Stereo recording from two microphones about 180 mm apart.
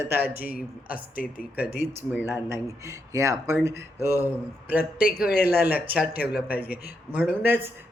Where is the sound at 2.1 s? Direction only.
10° right (ahead or behind).